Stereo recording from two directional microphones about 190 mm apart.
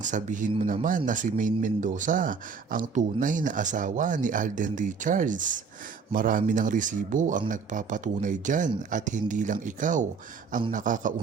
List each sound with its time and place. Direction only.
0.0 s speech: 40° right (ahead or behind)